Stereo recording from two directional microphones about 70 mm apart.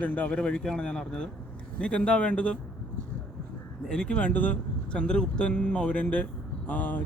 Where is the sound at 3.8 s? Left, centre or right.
Centre.